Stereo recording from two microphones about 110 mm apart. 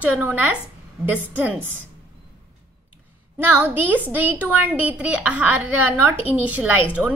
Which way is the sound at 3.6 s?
15° right (ahead or behind).